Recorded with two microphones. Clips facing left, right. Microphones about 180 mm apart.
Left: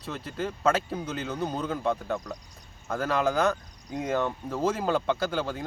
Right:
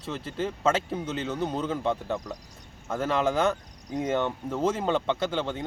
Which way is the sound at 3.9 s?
Centre (ahead or behind).